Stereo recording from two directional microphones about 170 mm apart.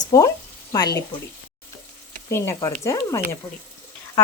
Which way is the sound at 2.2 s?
15° left (ahead or behind).